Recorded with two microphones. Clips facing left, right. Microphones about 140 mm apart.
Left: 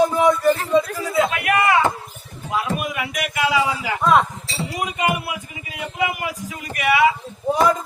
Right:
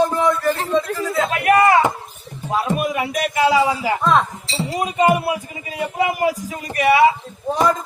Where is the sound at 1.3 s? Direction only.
35° right (ahead or behind).